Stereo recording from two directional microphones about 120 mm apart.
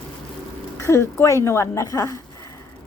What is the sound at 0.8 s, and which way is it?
A woman's voice, 25° left (ahead or behind).